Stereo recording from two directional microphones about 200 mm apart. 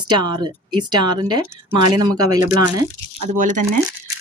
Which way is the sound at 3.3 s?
40° right (ahead or behind).